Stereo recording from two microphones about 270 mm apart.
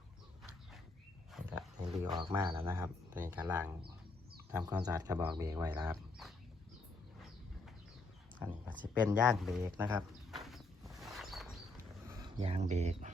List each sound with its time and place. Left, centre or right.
1.3 s wild animals: centre
2.0 s speech: centre
8.4 s a sound: centre
12.2 s speech: right